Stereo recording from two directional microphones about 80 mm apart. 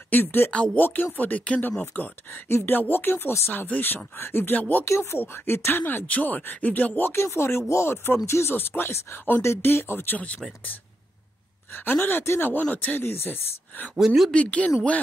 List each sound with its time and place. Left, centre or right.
0.1 s speech: left
0.5 s speech: centre
0.8 s speech: left
4.8 s speech: left; by 10.4 s centre
11.7 s speech: left
13.9 s speech: centre
14.3 s speech: centre